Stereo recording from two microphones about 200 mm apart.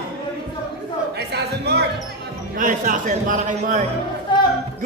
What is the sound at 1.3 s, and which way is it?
Speech, 55° right (ahead or behind).